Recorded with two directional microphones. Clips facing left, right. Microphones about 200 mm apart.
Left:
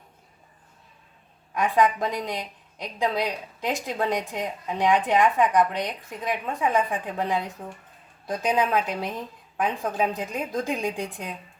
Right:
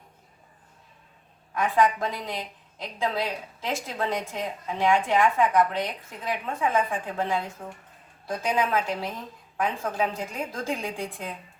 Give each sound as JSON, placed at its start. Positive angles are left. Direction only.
{"t": 1.5, "sound": "a woman's voice", "side_deg": 15}